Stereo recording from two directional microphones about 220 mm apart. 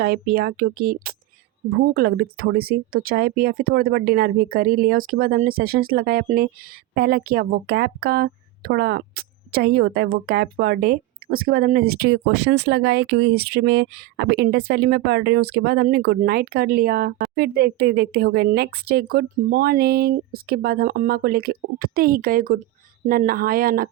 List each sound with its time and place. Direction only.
0.0 s speech: 45° right (ahead or behind)